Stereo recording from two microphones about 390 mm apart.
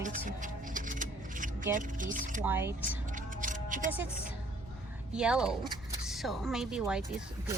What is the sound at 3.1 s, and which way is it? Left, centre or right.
Music, centre.